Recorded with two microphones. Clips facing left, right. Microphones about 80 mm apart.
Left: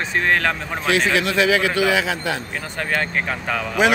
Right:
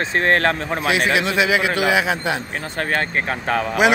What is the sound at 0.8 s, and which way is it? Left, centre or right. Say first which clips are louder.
A man's voice: left 1 dB; centre.